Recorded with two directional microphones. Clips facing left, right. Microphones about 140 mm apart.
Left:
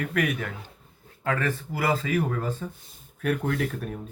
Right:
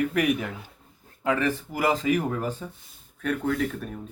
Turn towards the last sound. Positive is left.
turn(degrees=0)  # may be behind; listen again after turning